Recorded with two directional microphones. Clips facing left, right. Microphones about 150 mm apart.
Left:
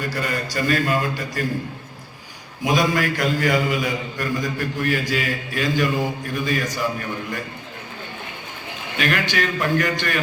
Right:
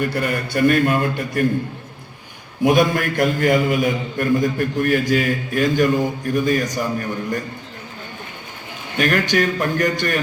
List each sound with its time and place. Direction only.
0.0 s a man's voice: 60° right (ahead or behind)
2.6 s mantra: 55° right (ahead or behind)
9.0 s mantra: 45° right (ahead or behind)